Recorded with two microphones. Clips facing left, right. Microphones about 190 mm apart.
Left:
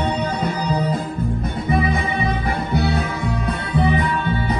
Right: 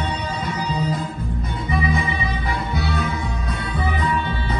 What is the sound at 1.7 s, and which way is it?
Music, 60° left (ahead or behind).